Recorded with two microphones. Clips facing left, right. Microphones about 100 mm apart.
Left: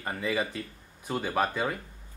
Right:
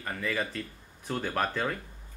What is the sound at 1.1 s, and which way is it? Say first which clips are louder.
Speech: left 2 dB; 5° left (ahead or behind).